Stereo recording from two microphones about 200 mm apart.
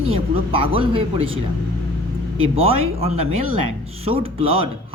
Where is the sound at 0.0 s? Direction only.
30° right (ahead or behind).